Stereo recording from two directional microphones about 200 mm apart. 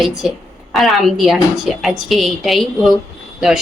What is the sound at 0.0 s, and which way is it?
Speech, centre (ahead or behind).